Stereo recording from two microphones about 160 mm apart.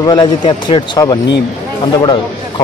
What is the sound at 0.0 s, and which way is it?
Speech, 25° left (ahead or behind).